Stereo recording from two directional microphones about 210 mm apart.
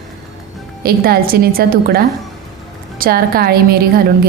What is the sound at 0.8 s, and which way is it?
A woman's voice, 45° right (ahead or behind).